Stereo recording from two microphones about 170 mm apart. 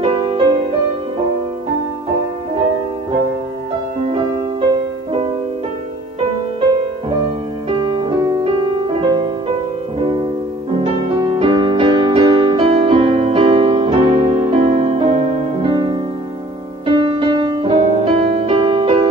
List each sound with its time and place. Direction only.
0.0 s music: 30° right (ahead or behind)
4.1 s music: 30° right (ahead or behind)
7.8 s music: 30° right (ahead or behind)
10.8 s music: 30° right (ahead or behind)